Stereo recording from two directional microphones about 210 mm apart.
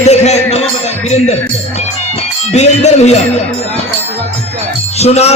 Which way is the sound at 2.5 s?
30° left (ahead or behind).